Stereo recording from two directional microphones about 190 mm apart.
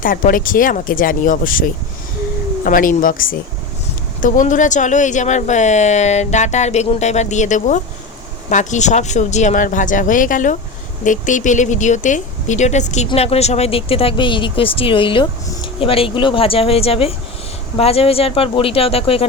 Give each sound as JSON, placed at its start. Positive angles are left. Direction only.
{"t": 0.0, "sound": "speech", "side_deg": 45}
{"t": 2.6, "sound": "speech", "side_deg": 45}